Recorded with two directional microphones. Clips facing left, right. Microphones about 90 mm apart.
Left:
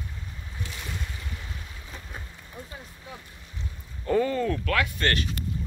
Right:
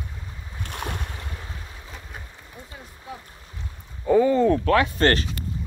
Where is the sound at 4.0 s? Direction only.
10° right (ahead or behind); by 5.2 s 35° right (ahead or behind).